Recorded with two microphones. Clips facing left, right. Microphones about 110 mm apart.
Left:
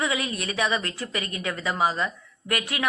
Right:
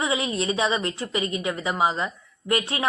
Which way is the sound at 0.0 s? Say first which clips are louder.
Right 3 dB; 25° right (ahead or behind).